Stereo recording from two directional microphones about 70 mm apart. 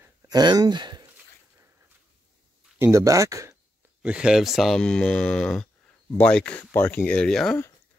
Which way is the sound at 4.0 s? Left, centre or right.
Centre.